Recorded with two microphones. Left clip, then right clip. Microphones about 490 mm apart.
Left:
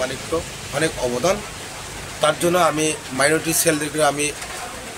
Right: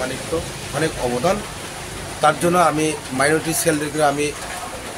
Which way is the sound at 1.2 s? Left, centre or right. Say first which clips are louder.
Right 1 dB; left.